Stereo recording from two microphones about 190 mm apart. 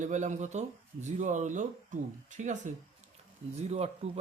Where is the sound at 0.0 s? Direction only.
40° right (ahead or behind).